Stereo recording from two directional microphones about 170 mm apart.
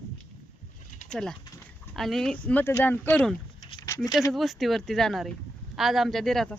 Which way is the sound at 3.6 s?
25° left (ahead or behind).